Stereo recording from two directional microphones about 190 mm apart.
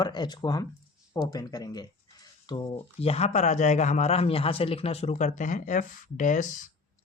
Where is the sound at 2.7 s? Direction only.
30° left (ahead or behind).